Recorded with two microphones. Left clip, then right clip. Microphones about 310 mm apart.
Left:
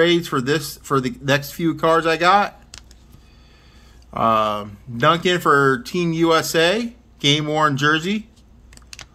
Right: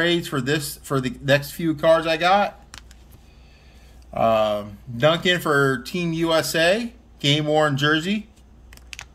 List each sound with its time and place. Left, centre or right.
0.0 s speech: centre
4.1 s speech: centre